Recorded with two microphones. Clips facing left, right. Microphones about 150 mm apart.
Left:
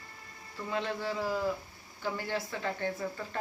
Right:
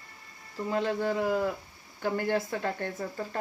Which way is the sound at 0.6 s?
45° right (ahead or behind).